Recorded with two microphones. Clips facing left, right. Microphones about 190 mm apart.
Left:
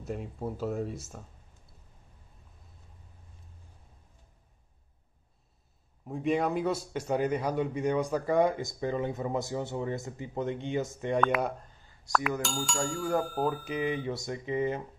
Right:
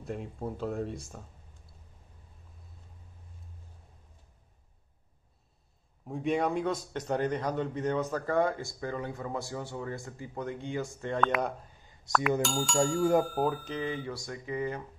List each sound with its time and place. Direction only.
0.0 s speech: centre (ahead or behind)
6.0 s a man's voice: centre (ahead or behind); by 11.1 s 20° left (ahead or behind)
11.2 s speech: 5° left (ahead or behind)
13.7 s speech: 20° left (ahead or behind)